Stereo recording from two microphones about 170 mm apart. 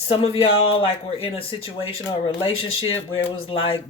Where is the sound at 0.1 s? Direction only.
35° left (ahead or behind).